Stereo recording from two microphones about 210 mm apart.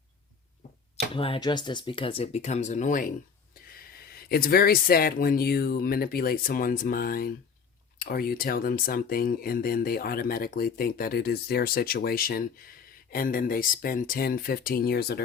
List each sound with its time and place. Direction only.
1.1 s speech: 25° left (ahead or behind); by 15.2 s 50° left (ahead or behind)